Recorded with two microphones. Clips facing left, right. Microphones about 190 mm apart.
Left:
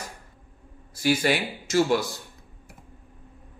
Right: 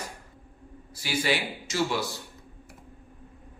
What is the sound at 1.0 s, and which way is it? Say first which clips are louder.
Speech: left 5 dB; 50° left (ahead or behind).